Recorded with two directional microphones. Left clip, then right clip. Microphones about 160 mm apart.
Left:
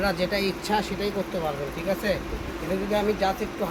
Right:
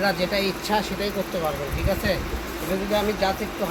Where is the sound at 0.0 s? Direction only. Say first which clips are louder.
Right 2 dB; 20° left (ahead or behind).